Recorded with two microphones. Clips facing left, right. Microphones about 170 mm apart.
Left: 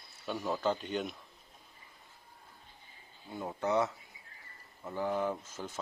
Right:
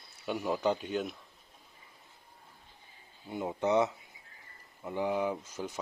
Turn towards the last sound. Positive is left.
turn(degrees=-15)  # may be behind; listen again after turning